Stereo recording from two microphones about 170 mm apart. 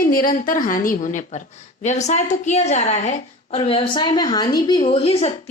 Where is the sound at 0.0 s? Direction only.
55° left (ahead or behind).